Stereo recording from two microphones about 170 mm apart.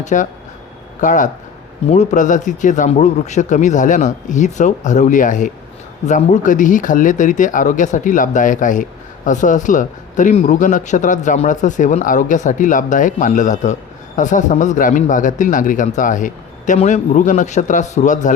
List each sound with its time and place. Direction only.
0.0 s speech: 45° left (ahead or behind)